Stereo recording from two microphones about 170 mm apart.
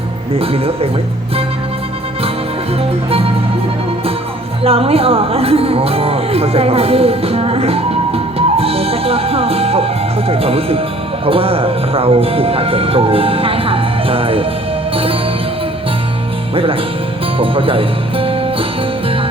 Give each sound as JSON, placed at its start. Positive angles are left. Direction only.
{"t": 0.3, "sound": "speech", "side_deg": -35}
{"t": 4.6, "sound": "speech", "side_deg": -35}
{"t": 17.3, "sound": "speech", "side_deg": -30}